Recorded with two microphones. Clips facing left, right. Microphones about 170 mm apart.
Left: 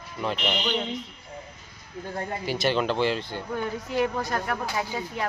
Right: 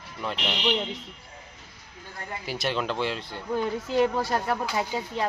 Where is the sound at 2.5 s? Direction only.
Centre (ahead or behind).